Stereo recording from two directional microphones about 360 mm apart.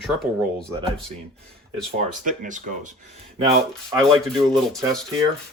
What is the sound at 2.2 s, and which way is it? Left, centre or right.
Speech, right.